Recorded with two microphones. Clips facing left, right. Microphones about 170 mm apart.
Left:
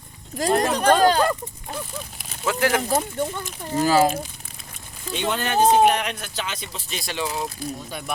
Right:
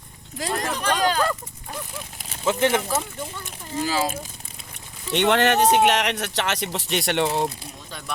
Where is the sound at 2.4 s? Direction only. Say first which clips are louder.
Right 1 dB; 25° right (ahead or behind).